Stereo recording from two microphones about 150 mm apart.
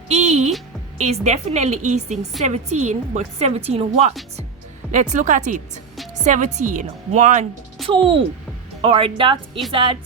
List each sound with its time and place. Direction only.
0.1 s music: 45° right (ahead or behind)
0.9 s a woman's voice: 50° right (ahead or behind)
7.9 s speech: 35° right (ahead or behind)